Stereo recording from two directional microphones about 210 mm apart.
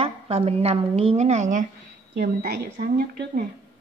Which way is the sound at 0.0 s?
30° right (ahead or behind).